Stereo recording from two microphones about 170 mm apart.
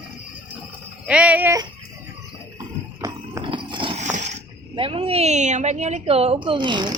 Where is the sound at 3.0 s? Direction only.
25° right (ahead or behind).